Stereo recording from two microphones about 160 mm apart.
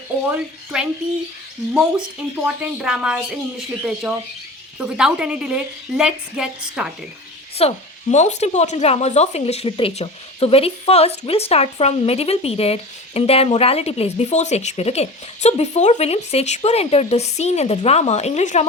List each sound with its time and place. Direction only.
0.7 s a woman's voice: 5° right (ahead or behind)
4.8 s a woman's voice: 5° right (ahead or behind)
7.6 s speech: 35° left (ahead or behind)